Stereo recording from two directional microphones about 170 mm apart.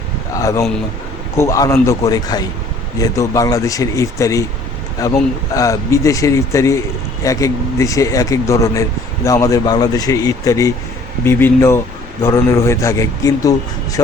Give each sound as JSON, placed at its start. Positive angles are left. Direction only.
{"t": 0.3, "sound": "a man's voice", "side_deg": 20}